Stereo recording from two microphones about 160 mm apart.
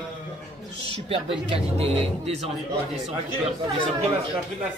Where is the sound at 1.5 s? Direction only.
40° right (ahead or behind).